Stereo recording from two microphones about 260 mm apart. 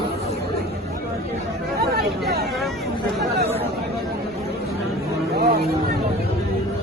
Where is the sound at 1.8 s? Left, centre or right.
Right.